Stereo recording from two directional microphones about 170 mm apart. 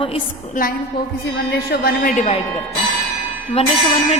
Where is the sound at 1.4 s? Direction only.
70° left (ahead or behind).